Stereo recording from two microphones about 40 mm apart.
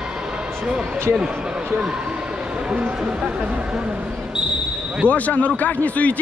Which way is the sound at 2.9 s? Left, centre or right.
Right.